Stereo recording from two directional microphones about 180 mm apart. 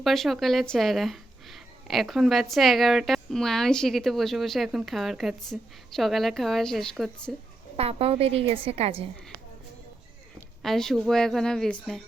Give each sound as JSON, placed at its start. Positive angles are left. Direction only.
{"t": 0.0, "sound": "speech", "side_deg": 0}
{"t": 7.8, "sound": "a woman's voice", "side_deg": -35}
{"t": 10.6, "sound": "speech", "side_deg": 0}